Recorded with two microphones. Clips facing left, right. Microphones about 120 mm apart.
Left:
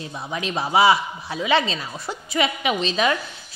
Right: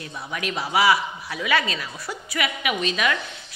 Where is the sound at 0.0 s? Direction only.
25° left (ahead or behind).